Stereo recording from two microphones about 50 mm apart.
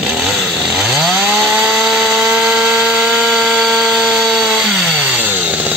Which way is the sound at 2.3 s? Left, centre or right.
Centre.